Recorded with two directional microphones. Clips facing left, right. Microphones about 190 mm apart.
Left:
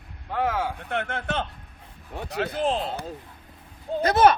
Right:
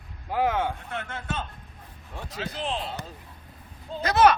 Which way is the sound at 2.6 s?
40° left (ahead or behind).